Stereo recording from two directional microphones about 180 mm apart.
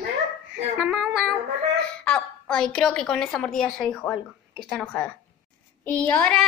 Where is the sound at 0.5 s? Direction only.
5° right (ahead or behind).